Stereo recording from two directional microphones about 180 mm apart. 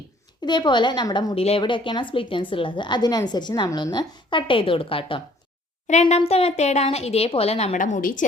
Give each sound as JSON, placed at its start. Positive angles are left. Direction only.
{"t": 0.4, "sound": "a woman's voice", "side_deg": 25}